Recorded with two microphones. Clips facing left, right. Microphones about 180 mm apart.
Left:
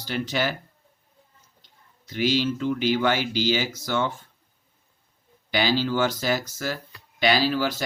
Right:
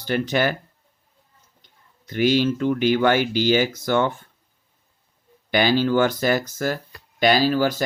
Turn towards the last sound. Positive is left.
turn(degrees=-45)  # may be behind; listen again after turning